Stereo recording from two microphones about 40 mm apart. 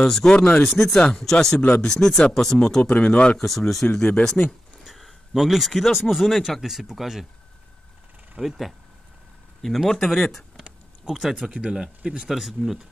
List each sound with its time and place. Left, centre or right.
0.0 s speech: centre
2.8 s speech: left
3.3 s speech: centre
3.8 s speech: left
4.8 s speech: centre
8.4 s speech: centre
9.8 s speech: centre
11.1 s speech: centre
12.0 s speech: right
12.3 s speech: centre